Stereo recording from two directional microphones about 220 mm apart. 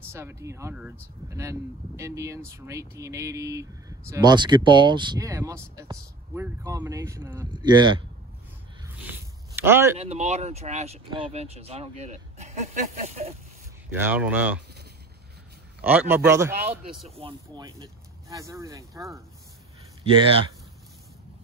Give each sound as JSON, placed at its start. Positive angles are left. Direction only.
{"t": 0.1, "sound": "speech", "side_deg": -10}
{"t": 9.6, "sound": "speech", "side_deg": -10}
{"t": 9.9, "sound": "speech", "side_deg": -30}
{"t": 13.9, "sound": "speech", "side_deg": -10}
{"t": 15.8, "sound": "speech", "side_deg": -10}